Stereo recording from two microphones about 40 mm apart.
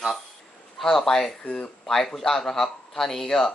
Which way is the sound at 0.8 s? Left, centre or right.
Centre.